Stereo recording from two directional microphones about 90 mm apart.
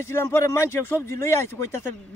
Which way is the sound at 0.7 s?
30° left (ahead or behind).